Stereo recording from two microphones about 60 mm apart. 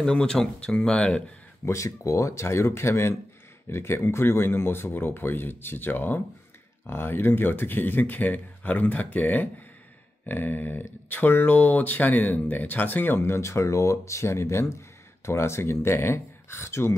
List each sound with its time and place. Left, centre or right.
0.0 s speech: centre
1.7 s speech: left
13.2 s speech: left